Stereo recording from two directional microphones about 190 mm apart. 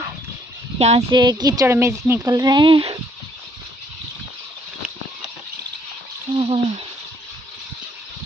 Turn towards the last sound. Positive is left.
turn(degrees=-30)  # may be behind; listen again after turning